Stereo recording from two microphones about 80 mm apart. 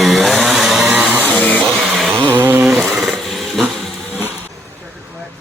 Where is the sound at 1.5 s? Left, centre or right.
Centre.